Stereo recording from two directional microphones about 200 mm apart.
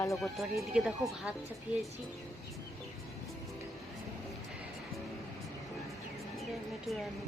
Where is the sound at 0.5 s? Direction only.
15° right (ahead or behind).